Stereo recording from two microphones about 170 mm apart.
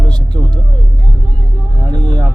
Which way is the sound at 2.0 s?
25° right (ahead or behind).